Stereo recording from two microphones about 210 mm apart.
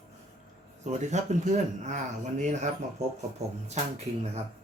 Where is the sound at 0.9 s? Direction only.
35° right (ahead or behind).